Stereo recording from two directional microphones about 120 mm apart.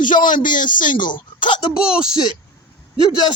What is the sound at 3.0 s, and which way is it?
Speech, 35° left (ahead or behind).